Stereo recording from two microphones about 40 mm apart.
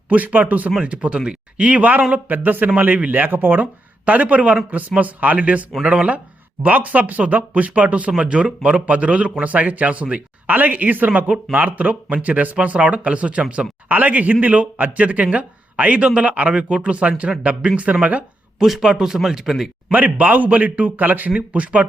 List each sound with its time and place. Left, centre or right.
0.1 s speech: right
2.7 s a man's voice: right
3.2 s speech: right
13.8 s speech: right
18.6 s speech: centre
19.9 s speech: right
21.3 s speech: right